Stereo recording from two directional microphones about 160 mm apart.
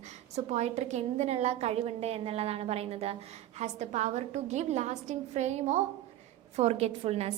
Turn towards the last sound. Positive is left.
turn(degrees=-40)  # may be behind; listen again after turning